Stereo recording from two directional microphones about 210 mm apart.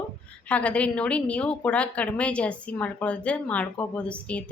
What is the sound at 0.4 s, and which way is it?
A woman's voice, 5° left (ahead or behind).